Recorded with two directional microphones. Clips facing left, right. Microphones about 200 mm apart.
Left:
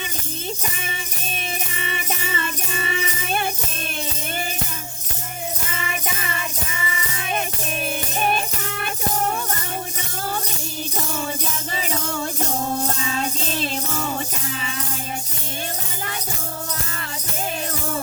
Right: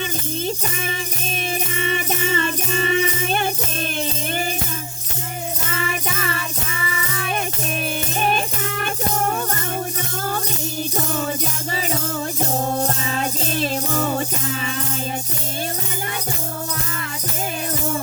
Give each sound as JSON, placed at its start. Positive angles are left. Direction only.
{"t": 1.7, "sound": "music", "side_deg": -40}
{"t": 11.9, "sound": "music", "side_deg": -40}